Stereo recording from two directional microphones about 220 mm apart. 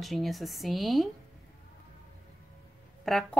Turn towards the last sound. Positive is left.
turn(degrees=0)  # may be behind; listen again after turning